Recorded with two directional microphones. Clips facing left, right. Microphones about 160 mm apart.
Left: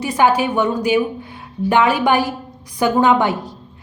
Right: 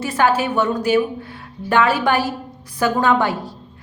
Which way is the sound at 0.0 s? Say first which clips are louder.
Left 2 dB; 15° left (ahead or behind).